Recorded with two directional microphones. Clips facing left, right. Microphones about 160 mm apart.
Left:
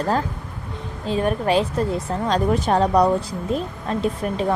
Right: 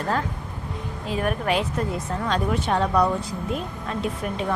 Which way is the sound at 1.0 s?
30° left (ahead or behind).